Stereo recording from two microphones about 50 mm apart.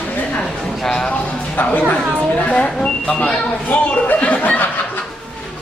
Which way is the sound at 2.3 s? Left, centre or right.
Left.